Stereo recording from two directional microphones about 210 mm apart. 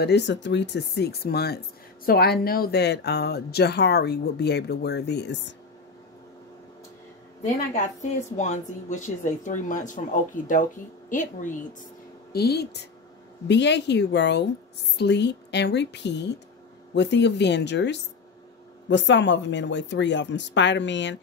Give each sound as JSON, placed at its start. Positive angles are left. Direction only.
{"t": 0.0, "sound": "speech", "side_deg": 55}
{"t": 7.4, "sound": "a woman's voice", "side_deg": 35}
{"t": 12.3, "sound": "speech", "side_deg": 50}